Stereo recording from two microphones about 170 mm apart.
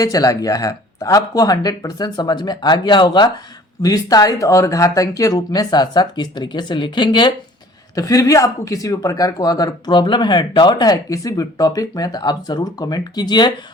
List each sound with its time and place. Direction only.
0.0 s speech: 20° left (ahead or behind)